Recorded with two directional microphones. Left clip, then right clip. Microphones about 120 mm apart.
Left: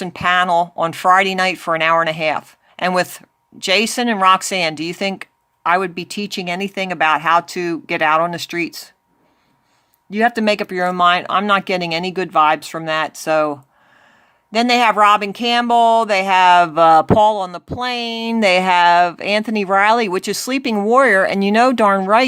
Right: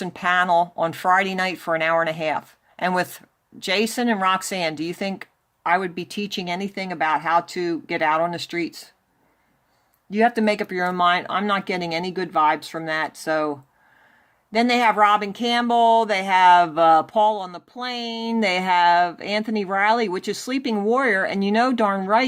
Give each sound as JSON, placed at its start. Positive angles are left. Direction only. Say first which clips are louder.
{"t": 0.0, "sound": "speech", "louder": "left 5 dB", "side_deg": 30}
{"t": 10.1, "sound": "speech", "louder": "left 4 dB", "side_deg": 30}